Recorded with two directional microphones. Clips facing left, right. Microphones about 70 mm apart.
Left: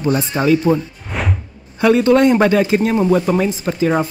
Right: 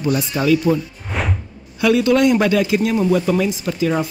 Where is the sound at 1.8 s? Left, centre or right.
Left.